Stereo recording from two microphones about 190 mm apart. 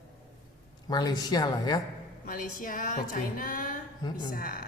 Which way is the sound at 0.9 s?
20° left (ahead or behind).